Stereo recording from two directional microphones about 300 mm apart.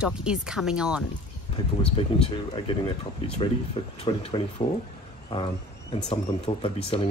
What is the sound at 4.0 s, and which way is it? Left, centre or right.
Speech, centre.